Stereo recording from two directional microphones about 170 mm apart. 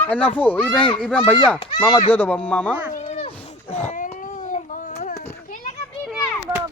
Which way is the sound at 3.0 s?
40° left (ahead or behind).